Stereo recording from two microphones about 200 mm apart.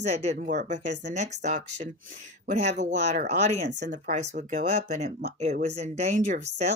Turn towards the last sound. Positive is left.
turn(degrees=-35)  # may be behind; listen again after turning